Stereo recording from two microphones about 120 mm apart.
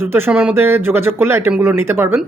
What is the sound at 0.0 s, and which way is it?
Speech, 20° right (ahead or behind).